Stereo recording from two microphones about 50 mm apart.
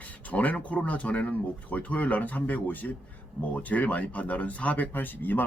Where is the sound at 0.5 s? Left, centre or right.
Left.